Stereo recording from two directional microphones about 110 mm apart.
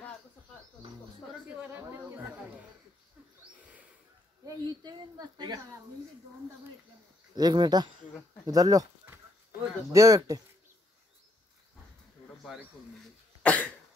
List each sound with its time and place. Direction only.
1.7 s a sound: 20° right (ahead or behind)
4.5 s a woman's voice: 35° right (ahead or behind)
7.3 s a woman's voice: 40° right (ahead or behind)
9.9 s a woman's voice: 30° right (ahead or behind)
13.4 s cough: 10° left (ahead or behind)